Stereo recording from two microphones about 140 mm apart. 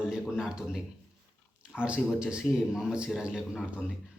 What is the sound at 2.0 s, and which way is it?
A man's voice, centre (ahead or behind).